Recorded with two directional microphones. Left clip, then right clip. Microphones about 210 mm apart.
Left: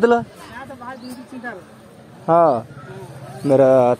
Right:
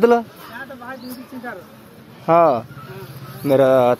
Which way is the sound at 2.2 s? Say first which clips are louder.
Even; 10° left (ahead or behind).